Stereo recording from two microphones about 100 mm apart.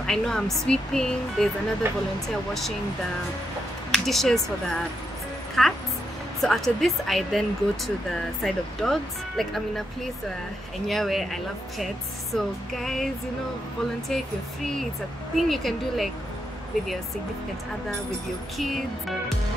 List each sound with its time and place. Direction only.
0.0 s speech: 5° left (ahead or behind)
1.8 s speech: 25° right (ahead or behind)
3.9 s speech: centre (ahead or behind)
10.9 s speech: centre (ahead or behind)
15.3 s speech: centre (ahead or behind)
18.6 s speech: centre (ahead or behind)